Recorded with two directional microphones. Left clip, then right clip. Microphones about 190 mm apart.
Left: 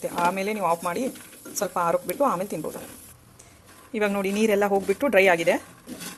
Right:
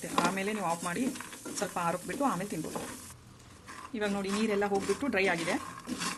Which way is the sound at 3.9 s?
30° left (ahead or behind).